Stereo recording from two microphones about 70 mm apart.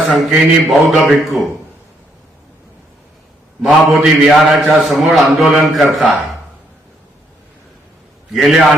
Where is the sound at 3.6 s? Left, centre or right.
Centre.